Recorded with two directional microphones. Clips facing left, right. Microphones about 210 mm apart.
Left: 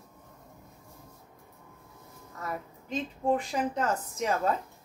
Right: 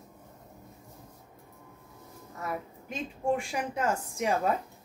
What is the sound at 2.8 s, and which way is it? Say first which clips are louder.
A woman's voice: left 2 dB; 10° right (ahead or behind).